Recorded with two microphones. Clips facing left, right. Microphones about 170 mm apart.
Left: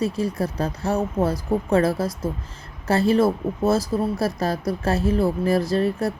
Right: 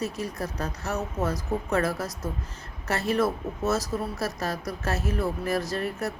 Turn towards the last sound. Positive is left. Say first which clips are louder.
# left 8 dB
turn(degrees=30)  # may be behind; listen again after turning